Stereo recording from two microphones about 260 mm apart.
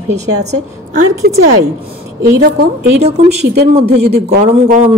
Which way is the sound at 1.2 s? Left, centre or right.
Right.